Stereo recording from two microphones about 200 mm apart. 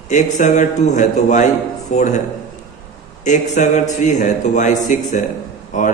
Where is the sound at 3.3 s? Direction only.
40° left (ahead or behind).